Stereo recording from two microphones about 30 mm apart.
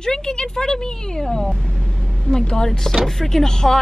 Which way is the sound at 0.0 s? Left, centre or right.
Left.